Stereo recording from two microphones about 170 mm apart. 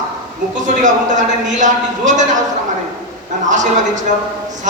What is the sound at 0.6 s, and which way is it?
A man's voice, 50° right (ahead or behind).